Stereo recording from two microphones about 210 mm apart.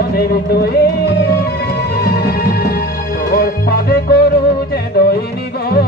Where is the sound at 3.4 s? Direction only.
45° left (ahead or behind).